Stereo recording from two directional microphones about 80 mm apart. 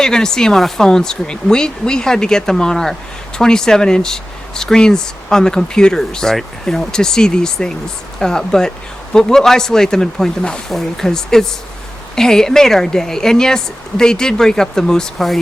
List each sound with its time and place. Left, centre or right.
0.0 s speech: centre